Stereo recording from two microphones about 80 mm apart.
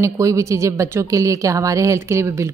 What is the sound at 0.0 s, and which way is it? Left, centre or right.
A woman's voice, right.